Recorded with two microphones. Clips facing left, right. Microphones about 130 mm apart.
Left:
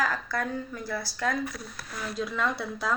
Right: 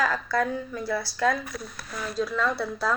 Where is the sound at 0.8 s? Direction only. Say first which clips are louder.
Right 5 dB; 25° right (ahead or behind).